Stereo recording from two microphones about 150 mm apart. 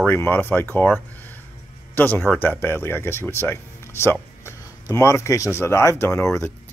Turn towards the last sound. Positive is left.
turn(degrees=20)  # may be behind; listen again after turning